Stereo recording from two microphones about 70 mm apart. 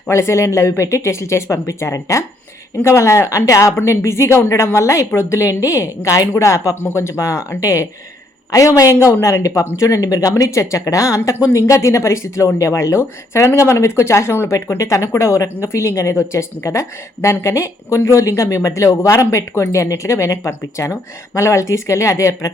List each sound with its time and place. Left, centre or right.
0.1 s a woman's voice: left